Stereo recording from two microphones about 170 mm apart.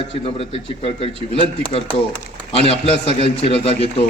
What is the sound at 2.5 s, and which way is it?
A man's voice, 35° left (ahead or behind).